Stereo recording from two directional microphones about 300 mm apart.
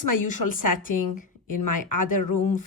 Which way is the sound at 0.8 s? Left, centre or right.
Left.